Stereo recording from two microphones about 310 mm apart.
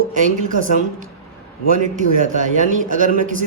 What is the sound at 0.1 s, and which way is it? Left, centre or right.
Speech, right.